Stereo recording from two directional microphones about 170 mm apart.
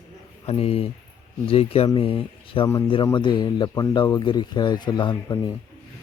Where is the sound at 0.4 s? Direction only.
35° left (ahead or behind).